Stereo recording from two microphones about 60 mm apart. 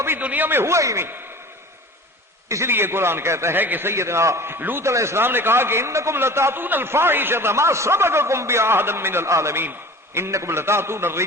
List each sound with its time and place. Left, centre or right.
0.2 s a man's voice: right
0.6 s a man's voice: right
2.5 s a man's voice: right
2.7 s a man's voice: right
3.6 s a man's voice: right
4.9 s a man's voice: right